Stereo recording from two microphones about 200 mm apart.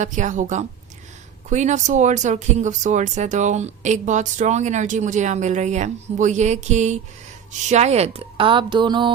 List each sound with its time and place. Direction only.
0.0 s speech: 40° right (ahead or behind); by 9.1 s 25° right (ahead or behind)